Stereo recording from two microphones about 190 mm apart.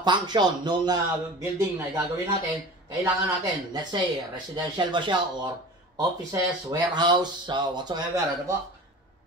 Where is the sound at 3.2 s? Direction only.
20° right (ahead or behind).